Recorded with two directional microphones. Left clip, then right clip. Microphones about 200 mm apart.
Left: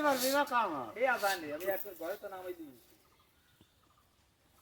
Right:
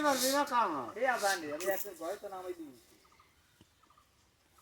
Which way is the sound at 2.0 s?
30° left (ahead or behind).